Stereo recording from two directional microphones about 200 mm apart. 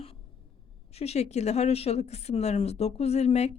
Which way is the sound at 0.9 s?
30° left (ahead or behind).